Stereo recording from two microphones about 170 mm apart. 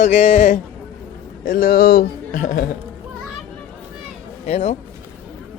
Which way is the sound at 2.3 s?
50° left (ahead or behind).